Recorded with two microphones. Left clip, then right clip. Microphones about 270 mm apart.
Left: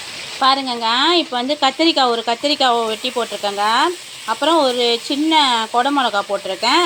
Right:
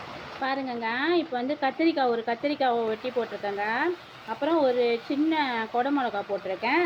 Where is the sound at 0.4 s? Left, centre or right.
Left.